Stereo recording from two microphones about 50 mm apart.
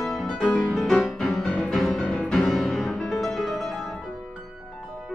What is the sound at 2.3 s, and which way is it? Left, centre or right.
Music, centre.